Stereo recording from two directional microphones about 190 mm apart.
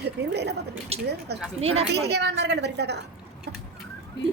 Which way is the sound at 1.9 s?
60° right (ahead or behind).